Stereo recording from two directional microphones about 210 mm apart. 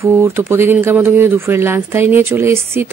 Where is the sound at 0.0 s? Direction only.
10° right (ahead or behind).